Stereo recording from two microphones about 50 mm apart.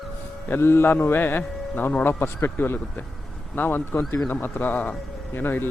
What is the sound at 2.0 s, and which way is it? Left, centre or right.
A man's voice, left.